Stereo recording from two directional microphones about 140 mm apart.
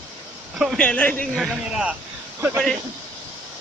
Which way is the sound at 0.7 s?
10° left (ahead or behind).